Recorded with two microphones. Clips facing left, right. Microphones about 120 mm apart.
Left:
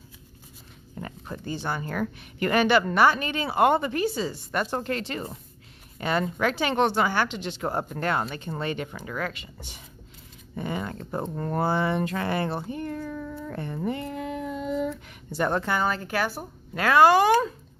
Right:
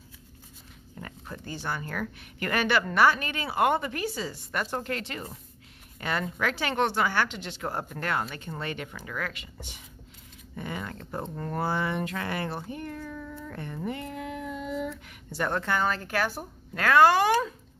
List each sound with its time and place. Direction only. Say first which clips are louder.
1.0 s speech: left 5 dB; 25° left (ahead or behind); by 16.8 s centre (ahead or behind)
16.8 s speech: left 2 dB; 15° left (ahead or behind)